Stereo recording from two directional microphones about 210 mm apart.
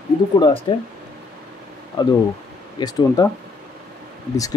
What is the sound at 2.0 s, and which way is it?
Speech, 20° left (ahead or behind).